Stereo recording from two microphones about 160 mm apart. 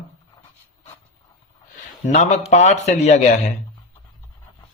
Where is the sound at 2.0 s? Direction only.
45° left (ahead or behind).